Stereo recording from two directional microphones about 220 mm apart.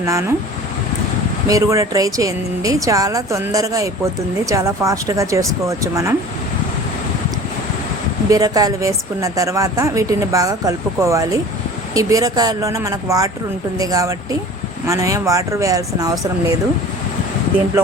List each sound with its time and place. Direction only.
0.0 s a woman's voice: 15° right (ahead or behind)
1.5 s a woman's voice: 15° right (ahead or behind)
8.3 s a woman's voice: 15° right (ahead or behind)